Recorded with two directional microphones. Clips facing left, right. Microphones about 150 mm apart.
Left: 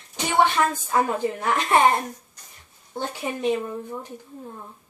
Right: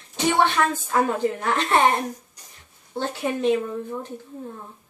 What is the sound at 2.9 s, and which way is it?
Female singing, 10° left (ahead or behind).